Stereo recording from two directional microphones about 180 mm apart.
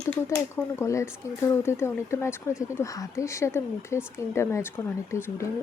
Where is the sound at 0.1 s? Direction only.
15° left (ahead or behind).